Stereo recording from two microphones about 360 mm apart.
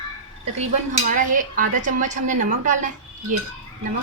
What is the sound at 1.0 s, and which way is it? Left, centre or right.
Speech, right.